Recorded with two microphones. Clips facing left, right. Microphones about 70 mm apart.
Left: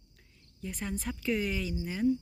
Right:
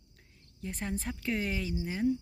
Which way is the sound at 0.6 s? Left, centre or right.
Right.